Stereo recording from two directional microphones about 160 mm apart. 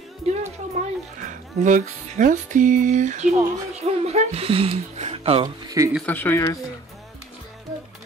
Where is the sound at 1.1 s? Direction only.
55° right (ahead or behind); by 5.5 s 40° right (ahead or behind).